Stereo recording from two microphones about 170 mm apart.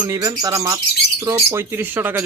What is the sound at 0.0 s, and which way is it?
Speech, 25° right (ahead or behind).